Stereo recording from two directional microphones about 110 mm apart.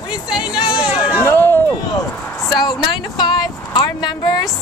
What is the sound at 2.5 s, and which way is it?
Speech, 40° left (ahead or behind).